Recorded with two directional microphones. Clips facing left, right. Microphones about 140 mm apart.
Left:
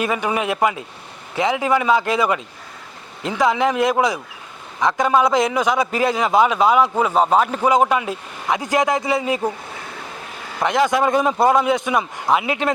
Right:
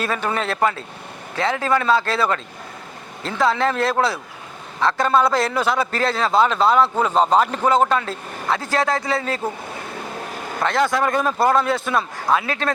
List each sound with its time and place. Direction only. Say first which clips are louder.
0.0 s a man's voice: left 2 dB; 15° left (ahead or behind)
10.6 s a man's voice: left 2 dB; 15° left (ahead or behind)